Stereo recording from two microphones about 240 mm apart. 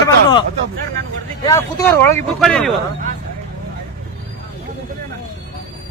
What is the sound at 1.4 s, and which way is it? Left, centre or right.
A man's voice, centre.